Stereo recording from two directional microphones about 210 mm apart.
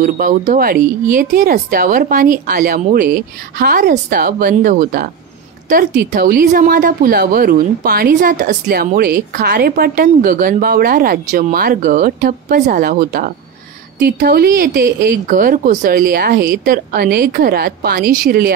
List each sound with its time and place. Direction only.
0.0 s speech: 40° right (ahead or behind)